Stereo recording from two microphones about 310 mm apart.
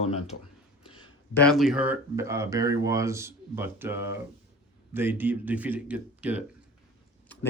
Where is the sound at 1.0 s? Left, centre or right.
Centre.